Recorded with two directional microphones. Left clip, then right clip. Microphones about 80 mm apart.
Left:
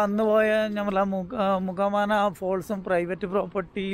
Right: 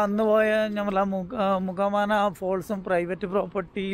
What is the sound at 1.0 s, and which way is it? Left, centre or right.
Speech, left.